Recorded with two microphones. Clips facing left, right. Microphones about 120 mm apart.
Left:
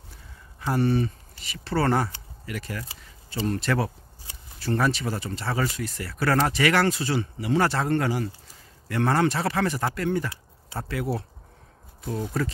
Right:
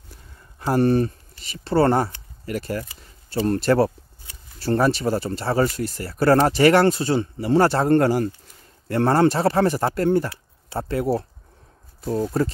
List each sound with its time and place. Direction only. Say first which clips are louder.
0.7 s speech: right 5 dB; 45° right (ahead or behind)
1.5 s speech: right 6 dB; 30° right (ahead or behind)